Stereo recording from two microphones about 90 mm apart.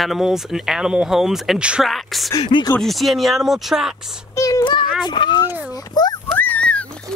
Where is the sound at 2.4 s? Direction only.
65° left (ahead or behind).